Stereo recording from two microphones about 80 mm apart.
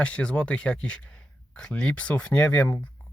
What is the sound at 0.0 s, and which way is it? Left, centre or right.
Speech, centre.